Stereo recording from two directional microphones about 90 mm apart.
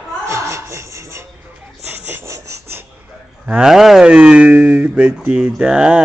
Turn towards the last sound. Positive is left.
turn(degrees=-10)  # may be behind; listen again after turning